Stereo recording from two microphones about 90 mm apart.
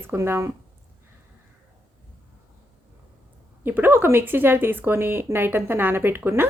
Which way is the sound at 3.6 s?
20° right (ahead or behind).